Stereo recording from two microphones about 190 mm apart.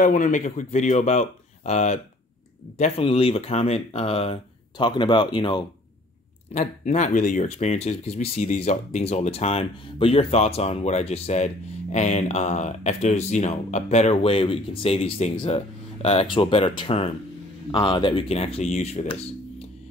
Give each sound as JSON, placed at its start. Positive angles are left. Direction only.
{"t": 0.0, "sound": "speech", "side_deg": 45}
{"t": 6.5, "sound": "speech", "side_deg": 40}